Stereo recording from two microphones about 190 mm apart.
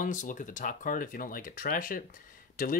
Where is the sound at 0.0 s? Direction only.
40° left (ahead or behind).